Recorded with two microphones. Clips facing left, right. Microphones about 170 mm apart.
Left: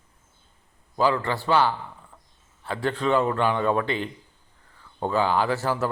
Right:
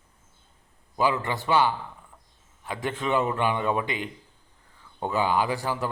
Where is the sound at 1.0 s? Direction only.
15° right (ahead or behind).